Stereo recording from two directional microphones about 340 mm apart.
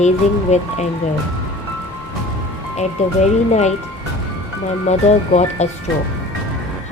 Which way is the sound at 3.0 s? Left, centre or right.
Centre.